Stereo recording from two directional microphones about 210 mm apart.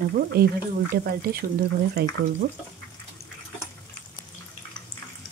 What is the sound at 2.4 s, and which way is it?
Speech, 40° right (ahead or behind).